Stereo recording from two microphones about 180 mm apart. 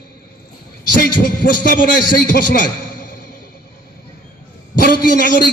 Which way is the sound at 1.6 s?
50° left (ahead or behind).